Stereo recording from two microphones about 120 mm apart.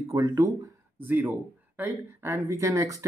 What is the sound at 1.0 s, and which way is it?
Speech, 15° right (ahead or behind).